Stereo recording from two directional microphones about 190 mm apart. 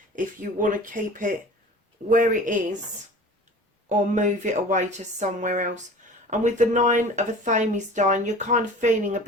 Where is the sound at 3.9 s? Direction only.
40° right (ahead or behind).